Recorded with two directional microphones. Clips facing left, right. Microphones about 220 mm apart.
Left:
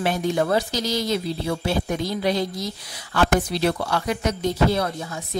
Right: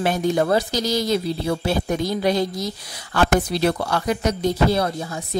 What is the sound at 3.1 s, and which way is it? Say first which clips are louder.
A woman's voice: right 2 dB; 45° right (ahead or behind).